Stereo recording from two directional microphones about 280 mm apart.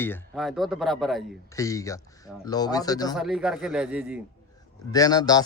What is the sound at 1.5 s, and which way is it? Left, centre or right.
Speech, centre.